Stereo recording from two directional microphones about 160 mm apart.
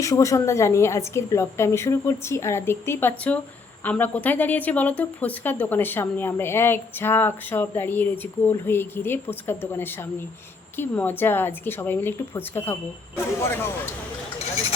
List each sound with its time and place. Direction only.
0.0 s speech: 20° left (ahead or behind)